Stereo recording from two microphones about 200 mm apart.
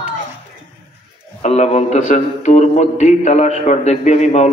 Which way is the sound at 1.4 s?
30° left (ahead or behind).